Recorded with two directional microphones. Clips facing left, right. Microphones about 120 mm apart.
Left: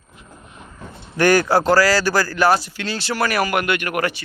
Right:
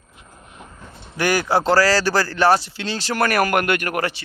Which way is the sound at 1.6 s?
30° right (ahead or behind).